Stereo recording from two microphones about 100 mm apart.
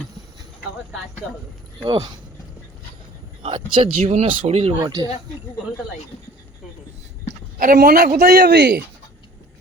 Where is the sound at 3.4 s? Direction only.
75° right (ahead or behind).